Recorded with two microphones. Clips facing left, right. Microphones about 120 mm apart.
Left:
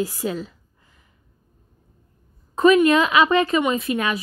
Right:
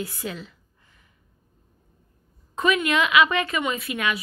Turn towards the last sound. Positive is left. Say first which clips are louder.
# left 5 dB
turn(degrees=35)  # may be behind; listen again after turning